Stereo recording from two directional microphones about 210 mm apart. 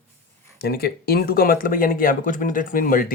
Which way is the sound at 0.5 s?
50° left (ahead or behind).